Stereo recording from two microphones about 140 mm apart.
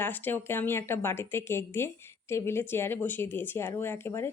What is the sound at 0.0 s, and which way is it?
A woman's voice, 15° left (ahead or behind).